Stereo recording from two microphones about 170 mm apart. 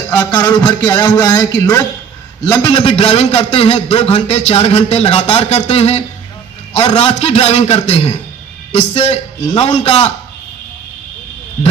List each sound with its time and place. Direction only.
0.1 s a man's voice: 15° left (ahead or behind)
2.6 s a man's voice: 35° left (ahead or behind)